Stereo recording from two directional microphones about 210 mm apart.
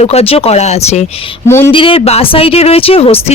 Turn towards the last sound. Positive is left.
turn(degrees=25)  # may be behind; listen again after turning